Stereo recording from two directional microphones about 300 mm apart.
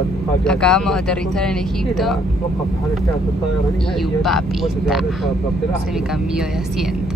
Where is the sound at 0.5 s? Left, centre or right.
Centre.